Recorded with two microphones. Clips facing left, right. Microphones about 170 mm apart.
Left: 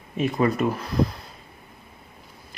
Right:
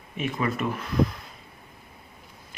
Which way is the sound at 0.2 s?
35° left (ahead or behind).